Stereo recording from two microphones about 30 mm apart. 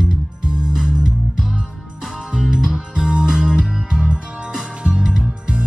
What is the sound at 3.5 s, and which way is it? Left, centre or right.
Music, centre.